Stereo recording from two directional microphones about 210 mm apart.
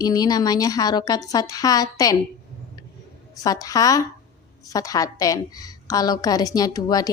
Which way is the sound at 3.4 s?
15° left (ahead or behind).